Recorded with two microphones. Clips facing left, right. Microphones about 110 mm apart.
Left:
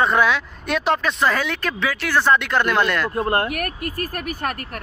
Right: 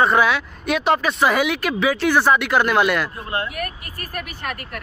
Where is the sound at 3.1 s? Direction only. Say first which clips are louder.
Left 6 dB; 55° left (ahead or behind).